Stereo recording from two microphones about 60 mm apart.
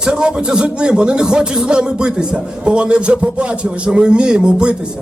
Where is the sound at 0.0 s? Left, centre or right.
Centre.